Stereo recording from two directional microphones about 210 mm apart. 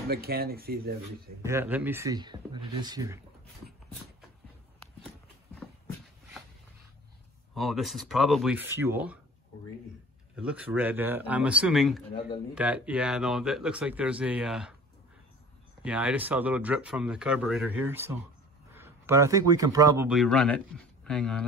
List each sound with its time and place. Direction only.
0.1 s speech: 45° right (ahead or behind)
1.4 s speech: 10° right (ahead or behind)
7.5 s speech: centre (ahead or behind)
10.3 s speech: 5° right (ahead or behind)
15.8 s a man's voice: 5° right (ahead or behind)
20.1 s speech: centre (ahead or behind)